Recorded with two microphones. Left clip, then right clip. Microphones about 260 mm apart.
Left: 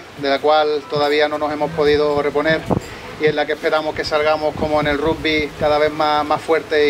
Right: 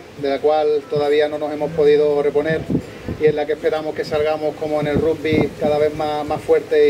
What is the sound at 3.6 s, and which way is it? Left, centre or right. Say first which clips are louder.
Speech: left 2 dB; centre.